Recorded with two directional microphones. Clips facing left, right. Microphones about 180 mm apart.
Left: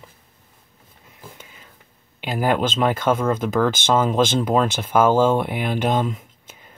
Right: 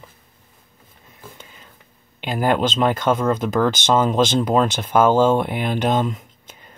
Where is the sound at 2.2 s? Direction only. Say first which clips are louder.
Right 1 dB; 5° left (ahead or behind).